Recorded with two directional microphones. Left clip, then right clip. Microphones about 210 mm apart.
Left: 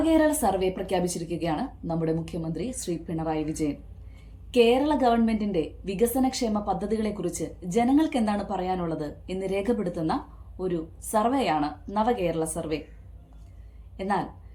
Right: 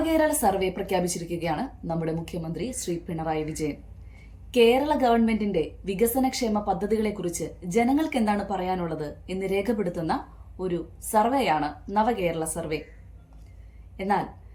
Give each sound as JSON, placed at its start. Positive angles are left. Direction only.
{"t": 0.0, "sound": "a woman's voice", "side_deg": -5}
{"t": 13.9, "sound": "a woman's voice", "side_deg": -5}